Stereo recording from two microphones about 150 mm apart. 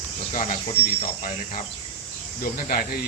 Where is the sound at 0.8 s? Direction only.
90° left.